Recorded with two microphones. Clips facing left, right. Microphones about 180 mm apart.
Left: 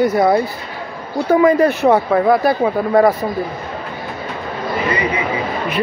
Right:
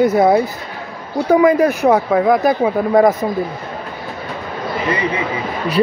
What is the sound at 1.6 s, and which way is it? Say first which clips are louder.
Speech: even; 15° right (ahead or behind).